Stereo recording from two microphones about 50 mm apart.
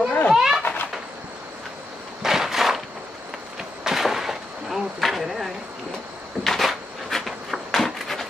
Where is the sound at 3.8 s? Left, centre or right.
Centre.